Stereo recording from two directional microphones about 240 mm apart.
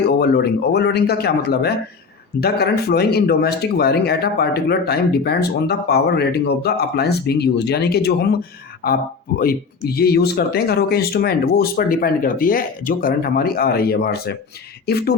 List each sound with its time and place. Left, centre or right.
0.1 s speech: left
9.4 s speech: left